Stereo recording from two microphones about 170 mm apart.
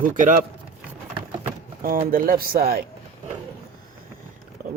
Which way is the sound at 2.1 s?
55° right (ahead or behind).